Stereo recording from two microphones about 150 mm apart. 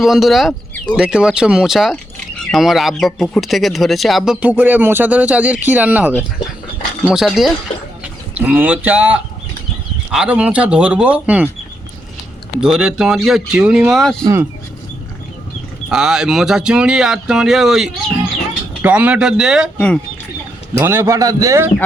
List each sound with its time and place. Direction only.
0.0 s speech: centre (ahead or behind)
12.5 s speech: 5° right (ahead or behind)
15.9 s speech: 5° right (ahead or behind)
20.7 s a man's voice: 15° right (ahead or behind)